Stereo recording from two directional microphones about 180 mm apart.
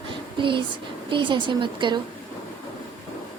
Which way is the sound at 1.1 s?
25° right (ahead or behind).